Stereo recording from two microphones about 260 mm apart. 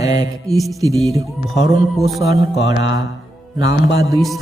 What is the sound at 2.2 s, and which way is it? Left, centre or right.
Speech, centre.